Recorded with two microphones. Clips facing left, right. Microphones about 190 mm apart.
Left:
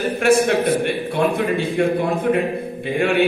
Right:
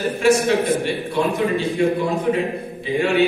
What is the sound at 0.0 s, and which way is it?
A man's voice, 55° left (ahead or behind).